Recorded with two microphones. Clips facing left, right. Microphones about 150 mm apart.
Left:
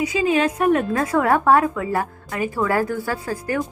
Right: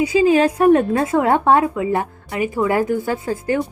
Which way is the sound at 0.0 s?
35° right (ahead or behind).